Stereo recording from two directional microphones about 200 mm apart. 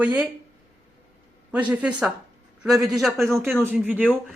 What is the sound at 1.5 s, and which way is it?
Speech, 5° right (ahead or behind).